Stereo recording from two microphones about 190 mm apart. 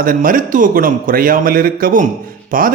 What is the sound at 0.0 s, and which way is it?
A man's voice, 45° right (ahead or behind).